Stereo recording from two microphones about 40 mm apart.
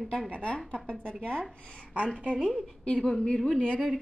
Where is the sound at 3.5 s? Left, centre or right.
Left.